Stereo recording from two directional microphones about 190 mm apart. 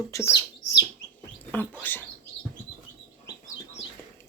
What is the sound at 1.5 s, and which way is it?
Speech, 10° left (ahead or behind).